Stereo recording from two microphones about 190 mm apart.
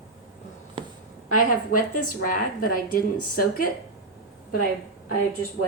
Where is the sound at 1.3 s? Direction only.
45° left (ahead or behind).